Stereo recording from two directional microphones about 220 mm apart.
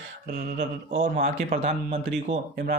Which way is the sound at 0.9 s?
30° right (ahead or behind).